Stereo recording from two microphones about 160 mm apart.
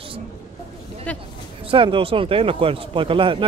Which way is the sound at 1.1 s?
10° left (ahead or behind).